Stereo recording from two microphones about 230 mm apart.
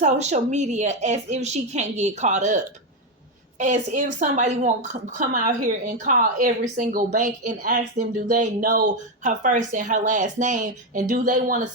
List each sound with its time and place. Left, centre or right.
0.0 s a woman's voice: right